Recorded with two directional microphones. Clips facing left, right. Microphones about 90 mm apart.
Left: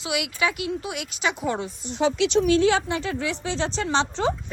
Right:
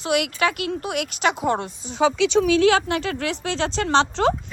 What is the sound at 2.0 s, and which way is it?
Speech, 90° right.